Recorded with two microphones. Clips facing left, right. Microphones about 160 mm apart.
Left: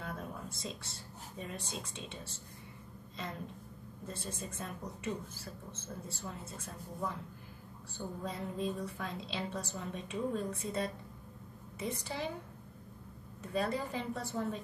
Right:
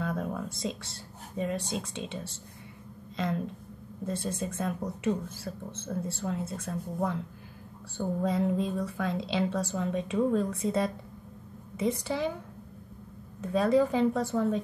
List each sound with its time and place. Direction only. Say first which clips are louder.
0.0 s speech: right 10 dB; 90° right
4.1 s a woman's voice: right 10 dB; 85° right
13.5 s a woman's voice: right 11 dB; 90° right